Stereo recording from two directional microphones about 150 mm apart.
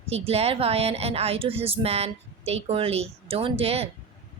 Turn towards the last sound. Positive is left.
turn(degrees=-40)  # may be behind; listen again after turning